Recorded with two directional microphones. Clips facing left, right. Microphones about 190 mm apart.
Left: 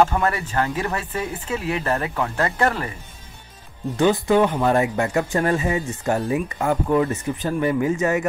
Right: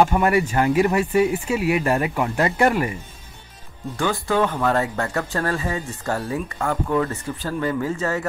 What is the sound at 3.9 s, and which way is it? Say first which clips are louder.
Speech: left 5 dB; 20° left (ahead or behind).